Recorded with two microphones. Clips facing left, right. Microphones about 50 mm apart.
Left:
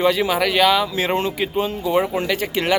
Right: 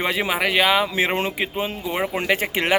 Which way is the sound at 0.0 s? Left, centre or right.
Right.